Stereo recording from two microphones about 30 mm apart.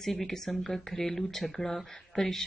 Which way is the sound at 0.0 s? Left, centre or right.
Centre.